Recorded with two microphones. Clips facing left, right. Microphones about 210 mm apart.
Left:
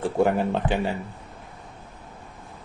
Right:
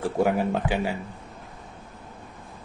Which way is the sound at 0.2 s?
5° right (ahead or behind).